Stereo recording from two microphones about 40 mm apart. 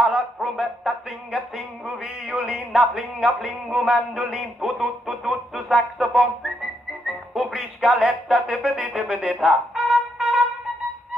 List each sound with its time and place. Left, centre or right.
0.0 s music: centre
1.9 s a sound: centre
9.5 s trumpet: centre